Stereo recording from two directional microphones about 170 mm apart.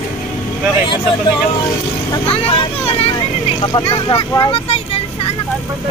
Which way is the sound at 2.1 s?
35° left (ahead or behind).